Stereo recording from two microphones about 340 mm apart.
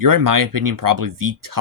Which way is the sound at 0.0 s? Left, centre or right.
Right.